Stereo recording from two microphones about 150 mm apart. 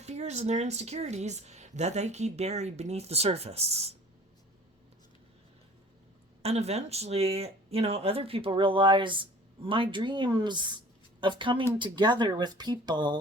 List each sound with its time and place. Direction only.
0.0 s speech: 45° right (ahead or behind)
6.4 s speech: 45° right (ahead or behind); by 13.1 s 30° right (ahead or behind)